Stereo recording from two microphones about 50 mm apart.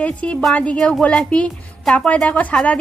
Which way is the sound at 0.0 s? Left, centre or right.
Left.